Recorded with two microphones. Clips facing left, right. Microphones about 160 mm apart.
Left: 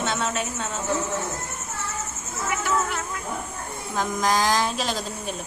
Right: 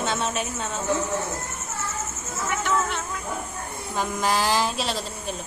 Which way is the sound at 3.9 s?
5° right (ahead or behind).